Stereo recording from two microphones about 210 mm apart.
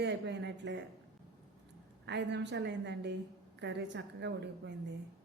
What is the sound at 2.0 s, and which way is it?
A woman's voice, 55° right (ahead or behind).